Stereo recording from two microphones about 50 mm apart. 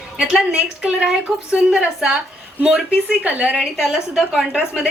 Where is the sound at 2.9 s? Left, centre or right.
Centre.